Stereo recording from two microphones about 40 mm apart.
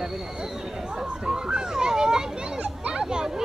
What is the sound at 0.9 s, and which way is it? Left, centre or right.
A child's voice, centre.